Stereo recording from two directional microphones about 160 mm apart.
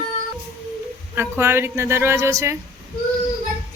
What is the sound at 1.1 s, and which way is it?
Speech, 15° right (ahead or behind).